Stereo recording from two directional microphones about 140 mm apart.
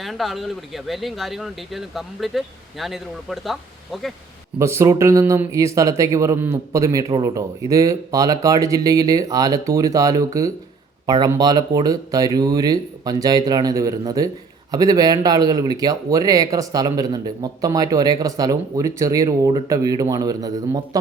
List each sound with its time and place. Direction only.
0.0 s speech: centre (ahead or behind)
4.6 s a man's voice: 20° right (ahead or behind)